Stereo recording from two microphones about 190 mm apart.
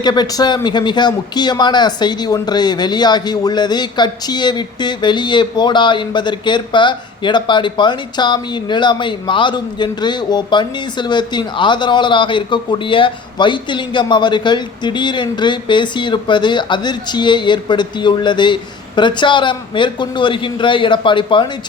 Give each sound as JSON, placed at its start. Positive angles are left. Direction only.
{"t": 0.0, "sound": "speech", "side_deg": 20}